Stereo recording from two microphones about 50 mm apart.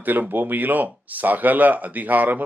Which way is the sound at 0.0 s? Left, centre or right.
Right.